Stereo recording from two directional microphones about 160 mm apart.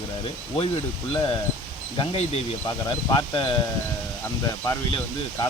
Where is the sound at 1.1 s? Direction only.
30° left (ahead or behind).